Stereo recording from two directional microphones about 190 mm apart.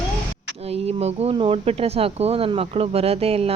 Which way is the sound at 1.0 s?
30° right (ahead or behind).